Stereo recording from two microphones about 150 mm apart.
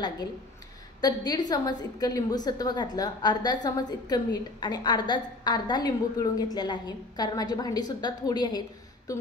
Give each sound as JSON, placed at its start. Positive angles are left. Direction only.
{"t": 1.0, "sound": "a woman's voice", "side_deg": 25}